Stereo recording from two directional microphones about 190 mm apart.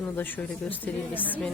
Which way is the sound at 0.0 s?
10° left (ahead or behind).